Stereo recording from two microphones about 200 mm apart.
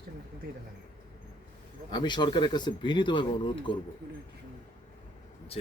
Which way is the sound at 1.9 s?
20° left (ahead or behind).